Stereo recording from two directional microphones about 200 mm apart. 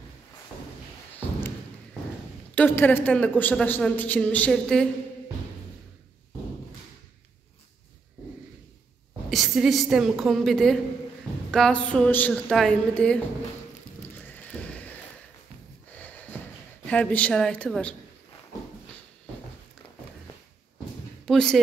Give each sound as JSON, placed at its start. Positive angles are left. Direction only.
{"t": 2.5, "sound": "a woman's voice", "side_deg": 10}
{"t": 9.3, "sound": "a woman's voice", "side_deg": 0}
{"t": 14.1, "sound": "a sound", "side_deg": 10}
{"t": 15.9, "sound": "snort", "side_deg": 10}
{"t": 16.8, "sound": "a woman's voice", "side_deg": 5}
{"t": 21.3, "sound": "speech", "side_deg": 0}